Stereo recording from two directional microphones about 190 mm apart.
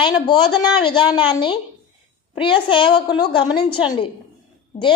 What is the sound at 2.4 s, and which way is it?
A woman's voice, 25° left (ahead or behind).